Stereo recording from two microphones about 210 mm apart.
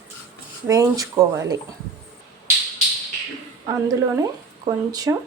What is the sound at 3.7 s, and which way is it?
A woman's voice, 15° right (ahead or behind).